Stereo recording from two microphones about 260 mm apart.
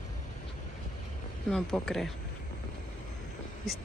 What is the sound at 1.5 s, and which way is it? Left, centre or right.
Speech, centre.